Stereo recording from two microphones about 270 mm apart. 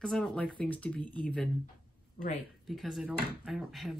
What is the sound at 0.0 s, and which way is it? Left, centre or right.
Speech, centre.